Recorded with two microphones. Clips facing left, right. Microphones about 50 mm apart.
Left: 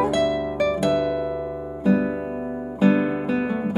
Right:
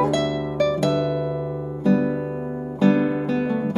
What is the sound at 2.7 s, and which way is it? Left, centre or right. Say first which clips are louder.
Music: right 1 dB; centre.